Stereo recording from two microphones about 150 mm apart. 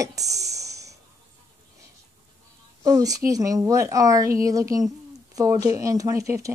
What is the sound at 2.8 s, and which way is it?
Speech, 25° right (ahead or behind).